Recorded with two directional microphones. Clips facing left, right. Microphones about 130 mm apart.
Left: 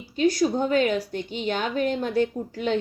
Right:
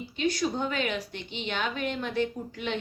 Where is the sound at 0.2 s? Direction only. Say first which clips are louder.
Left 7 dB; 40° left (ahead or behind).